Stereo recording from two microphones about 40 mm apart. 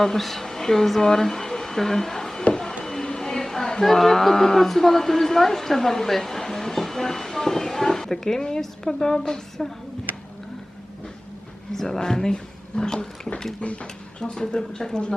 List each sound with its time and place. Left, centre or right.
0.0 s speech: centre
2.4 s a sound: centre
2.8 s speech: centre
11.7 s speech: centre